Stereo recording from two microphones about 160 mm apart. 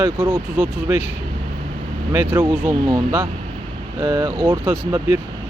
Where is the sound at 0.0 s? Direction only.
15° right (ahead or behind).